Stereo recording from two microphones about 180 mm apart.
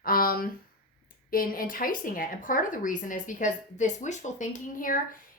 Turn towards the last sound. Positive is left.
turn(degrees=50)  # may be behind; listen again after turning